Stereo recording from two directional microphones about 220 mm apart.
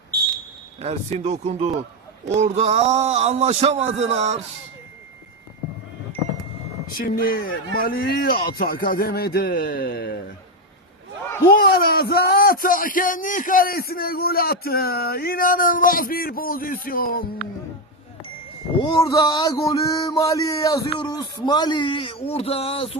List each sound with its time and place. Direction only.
0.8 s a man's voice: 30° right (ahead or behind)
7.0 s speech: 40° left (ahead or behind)
11.6 s speech: 40° left (ahead or behind)
18.8 s a sound: 20° left (ahead or behind)